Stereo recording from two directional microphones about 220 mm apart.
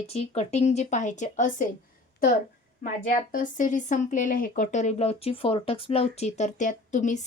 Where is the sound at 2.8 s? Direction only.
40° left (ahead or behind).